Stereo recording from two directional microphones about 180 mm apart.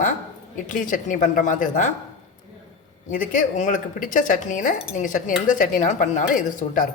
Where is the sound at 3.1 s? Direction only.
50° left (ahead or behind).